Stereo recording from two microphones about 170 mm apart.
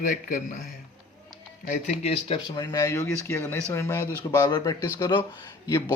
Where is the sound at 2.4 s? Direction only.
25° left (ahead or behind).